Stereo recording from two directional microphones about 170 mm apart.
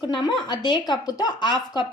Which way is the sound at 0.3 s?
25° left (ahead or behind).